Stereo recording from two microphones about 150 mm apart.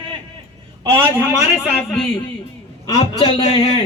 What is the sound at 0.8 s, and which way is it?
Speech, 15° right (ahead or behind).